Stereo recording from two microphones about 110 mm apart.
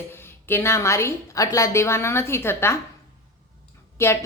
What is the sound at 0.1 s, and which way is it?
A woman's voice, 20° left (ahead or behind).